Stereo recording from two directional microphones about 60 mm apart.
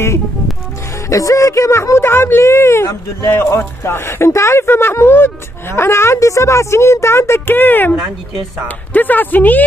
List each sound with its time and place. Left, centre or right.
1.1 s speech: left